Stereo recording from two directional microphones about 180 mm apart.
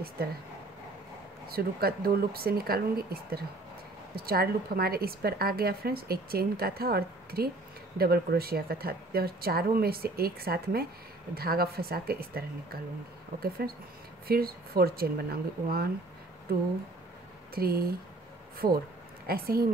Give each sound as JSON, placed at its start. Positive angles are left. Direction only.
{"t": 1.5, "sound": "a woman's voice", "side_deg": -55}
{"t": 19.2, "sound": "a woman's voice", "side_deg": -55}